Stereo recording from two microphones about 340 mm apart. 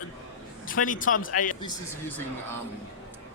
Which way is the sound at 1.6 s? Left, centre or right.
Centre.